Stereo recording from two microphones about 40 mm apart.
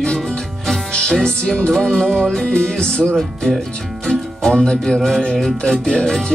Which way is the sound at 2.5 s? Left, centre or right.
Left.